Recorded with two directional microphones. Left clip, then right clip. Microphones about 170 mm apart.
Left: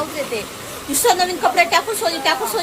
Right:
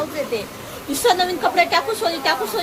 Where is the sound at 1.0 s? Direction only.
10° left (ahead or behind).